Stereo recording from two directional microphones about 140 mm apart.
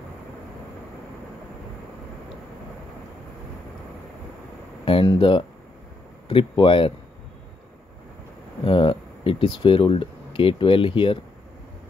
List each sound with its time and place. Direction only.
4.8 s speech: 35° left (ahead or behind)
8.6 s speech: 40° left (ahead or behind)